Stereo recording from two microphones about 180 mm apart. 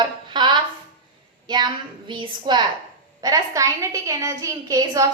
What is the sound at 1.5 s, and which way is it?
A woman's voice, 25° right (ahead or behind).